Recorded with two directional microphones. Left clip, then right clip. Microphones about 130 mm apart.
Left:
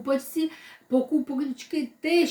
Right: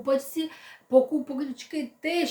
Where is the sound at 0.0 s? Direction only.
25° right (ahead or behind).